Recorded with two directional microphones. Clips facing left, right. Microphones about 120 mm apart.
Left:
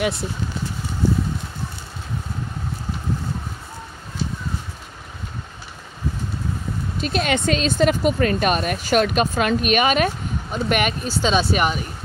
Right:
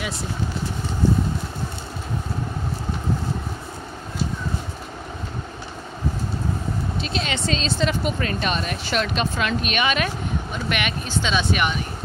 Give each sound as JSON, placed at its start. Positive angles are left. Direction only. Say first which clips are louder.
{"t": 7.0, "sound": "speech", "louder": "left 9 dB", "side_deg": 50}